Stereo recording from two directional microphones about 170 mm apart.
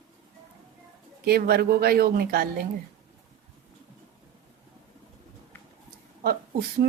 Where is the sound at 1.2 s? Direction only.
65° right (ahead or behind).